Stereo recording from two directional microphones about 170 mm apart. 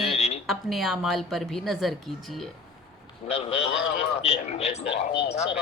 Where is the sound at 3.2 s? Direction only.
35° left (ahead or behind).